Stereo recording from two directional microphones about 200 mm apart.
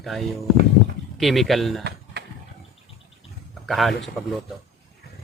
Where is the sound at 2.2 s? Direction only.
55° right (ahead or behind).